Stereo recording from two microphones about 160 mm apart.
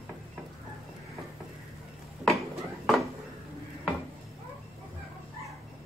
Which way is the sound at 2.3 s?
Centre (ahead or behind).